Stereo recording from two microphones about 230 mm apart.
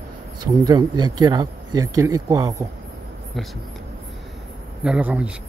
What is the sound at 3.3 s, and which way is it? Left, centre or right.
Speech, centre.